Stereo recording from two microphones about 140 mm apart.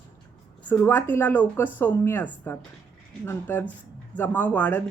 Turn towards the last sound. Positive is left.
turn(degrees=10)  # may be behind; listen again after turning